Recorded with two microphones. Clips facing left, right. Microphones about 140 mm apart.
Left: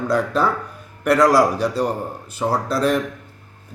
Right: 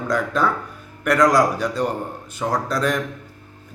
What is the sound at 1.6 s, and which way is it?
A man's voice, 35° left (ahead or behind).